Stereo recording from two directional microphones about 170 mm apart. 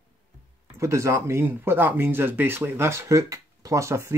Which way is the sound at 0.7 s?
15° right (ahead or behind).